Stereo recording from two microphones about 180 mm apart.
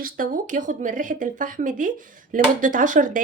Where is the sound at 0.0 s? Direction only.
50° right (ahead or behind).